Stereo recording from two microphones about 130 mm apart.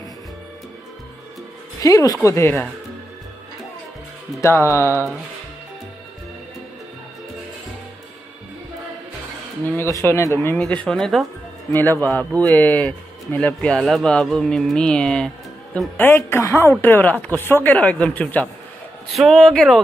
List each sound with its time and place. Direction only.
1.8 s speech: 25° left (ahead or behind)
4.4 s speech: 20° left (ahead or behind)
9.7 s speech: 20° left (ahead or behind)
10.9 s speech: 5° left (ahead or behind)
11.7 s speech: 15° left (ahead or behind)
19.0 s speech: centre (ahead or behind)